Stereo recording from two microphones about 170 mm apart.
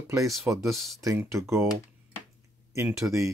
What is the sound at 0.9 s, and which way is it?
Speech, 15° right (ahead or behind).